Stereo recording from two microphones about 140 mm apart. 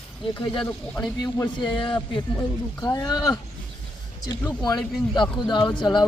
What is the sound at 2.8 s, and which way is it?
Speech, 25° left (ahead or behind).